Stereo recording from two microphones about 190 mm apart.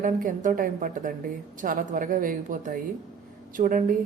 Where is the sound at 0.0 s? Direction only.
45° right (ahead or behind).